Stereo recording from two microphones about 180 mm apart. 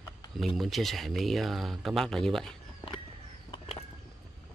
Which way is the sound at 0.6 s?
Centre (ahead or behind).